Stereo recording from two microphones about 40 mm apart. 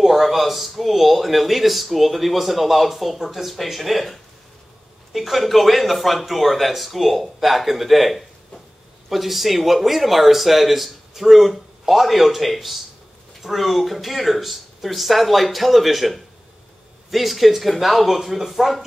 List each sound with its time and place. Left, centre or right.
0.0 s speech: centre